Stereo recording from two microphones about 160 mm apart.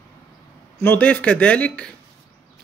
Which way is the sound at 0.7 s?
10° left (ahead or behind).